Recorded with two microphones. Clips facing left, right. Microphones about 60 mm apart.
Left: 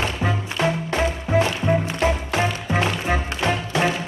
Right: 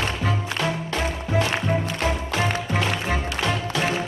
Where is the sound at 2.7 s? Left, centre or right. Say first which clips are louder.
Left 2 dB; left.